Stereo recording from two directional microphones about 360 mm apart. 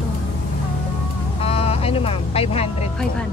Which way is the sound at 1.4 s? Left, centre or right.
Centre.